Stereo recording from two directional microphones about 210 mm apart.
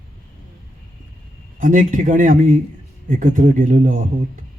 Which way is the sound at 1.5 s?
40° right (ahead or behind).